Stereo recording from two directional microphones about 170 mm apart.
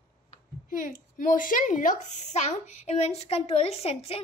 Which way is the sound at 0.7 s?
55° left (ahead or behind).